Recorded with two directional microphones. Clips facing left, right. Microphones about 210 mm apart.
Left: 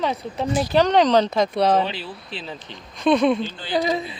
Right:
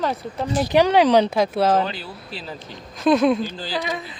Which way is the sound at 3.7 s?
30° left (ahead or behind).